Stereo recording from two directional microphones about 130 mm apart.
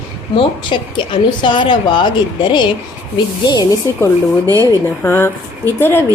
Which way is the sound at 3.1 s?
35° left (ahead or behind).